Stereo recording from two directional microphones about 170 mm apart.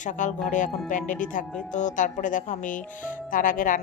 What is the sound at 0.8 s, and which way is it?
A woman's voice, 50° left (ahead or behind).